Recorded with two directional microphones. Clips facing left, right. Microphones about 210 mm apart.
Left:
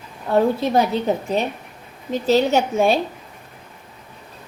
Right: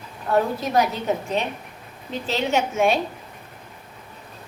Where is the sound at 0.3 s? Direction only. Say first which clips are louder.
Left 4 dB; 30° left (ahead or behind).